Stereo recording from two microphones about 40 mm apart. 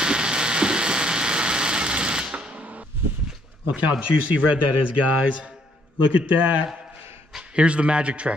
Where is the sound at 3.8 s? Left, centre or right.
Right.